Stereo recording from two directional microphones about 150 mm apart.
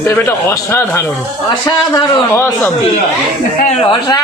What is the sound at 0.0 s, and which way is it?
A man's voice, 15° left (ahead or behind).